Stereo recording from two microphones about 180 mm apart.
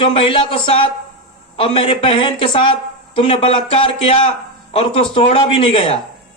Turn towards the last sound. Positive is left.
turn(degrees=30)  # may be behind; listen again after turning